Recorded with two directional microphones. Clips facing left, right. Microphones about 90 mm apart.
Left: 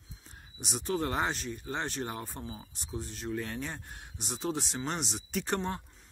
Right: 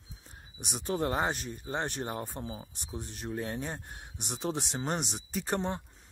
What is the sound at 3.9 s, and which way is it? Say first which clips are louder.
Speech: even; 50° right (ahead or behind).